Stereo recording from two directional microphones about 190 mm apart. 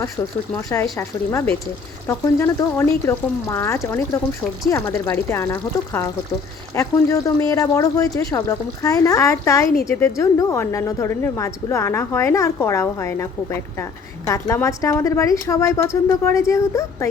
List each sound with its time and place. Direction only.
0.2 s a woman's voice: 15° left (ahead or behind)